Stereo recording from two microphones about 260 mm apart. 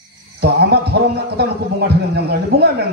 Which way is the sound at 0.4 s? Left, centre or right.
Right.